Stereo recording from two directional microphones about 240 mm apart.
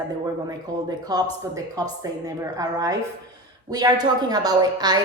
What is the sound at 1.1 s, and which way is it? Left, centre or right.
A woman's voice, centre.